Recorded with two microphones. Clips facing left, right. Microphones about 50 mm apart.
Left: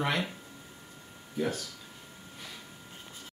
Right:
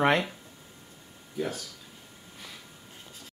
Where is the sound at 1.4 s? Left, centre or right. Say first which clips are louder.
Left 1 dB; centre.